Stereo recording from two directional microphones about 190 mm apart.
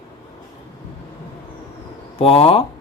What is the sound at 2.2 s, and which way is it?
Speech, 30° left (ahead or behind).